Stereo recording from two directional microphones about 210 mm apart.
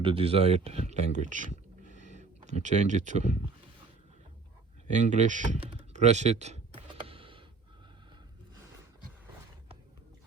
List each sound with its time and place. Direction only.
0.0 s speech: 25° right (ahead or behind)
4.9 s computer keyboard: 35° right (ahead or behind)